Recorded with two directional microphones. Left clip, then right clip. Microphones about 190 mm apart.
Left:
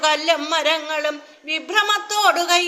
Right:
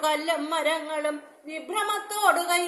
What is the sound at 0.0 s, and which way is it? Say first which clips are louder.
A man's voice: left 7 dB; 5° left (ahead or behind).